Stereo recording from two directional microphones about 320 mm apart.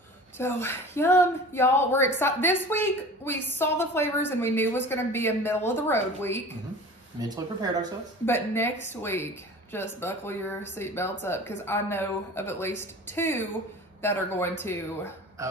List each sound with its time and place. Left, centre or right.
0.4 s a woman's voice: centre
7.2 s speech: centre
8.3 s a woman's voice: centre